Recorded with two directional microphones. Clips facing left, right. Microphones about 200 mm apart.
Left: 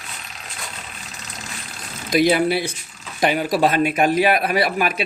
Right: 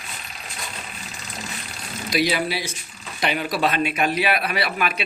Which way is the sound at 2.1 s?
50° left (ahead or behind).